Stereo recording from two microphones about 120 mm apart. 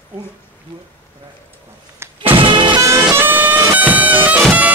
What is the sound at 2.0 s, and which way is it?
Music, 20° right (ahead or behind).